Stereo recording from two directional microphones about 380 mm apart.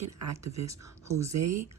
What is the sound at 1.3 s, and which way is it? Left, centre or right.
Speech, right.